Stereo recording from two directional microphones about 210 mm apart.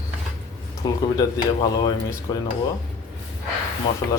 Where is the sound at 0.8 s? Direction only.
20° left (ahead or behind).